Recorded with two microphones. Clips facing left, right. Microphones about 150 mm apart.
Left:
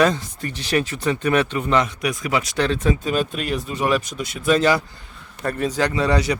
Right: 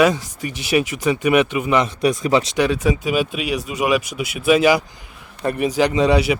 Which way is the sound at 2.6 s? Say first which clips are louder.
Right 2 dB; 10° right (ahead or behind).